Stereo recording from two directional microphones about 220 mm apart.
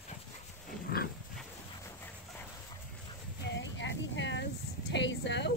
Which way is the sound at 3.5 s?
55° left (ahead or behind).